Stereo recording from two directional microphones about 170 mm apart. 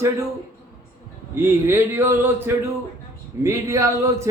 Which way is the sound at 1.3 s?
15° right (ahead or behind).